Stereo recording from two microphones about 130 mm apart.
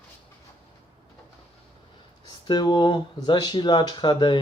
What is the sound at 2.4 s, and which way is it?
Speech, 35° left (ahead or behind).